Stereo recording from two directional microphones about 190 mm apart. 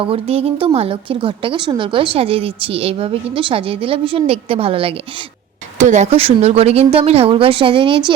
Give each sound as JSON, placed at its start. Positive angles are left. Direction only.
{"t": 0.0, "sound": "a woman's voice", "side_deg": -30}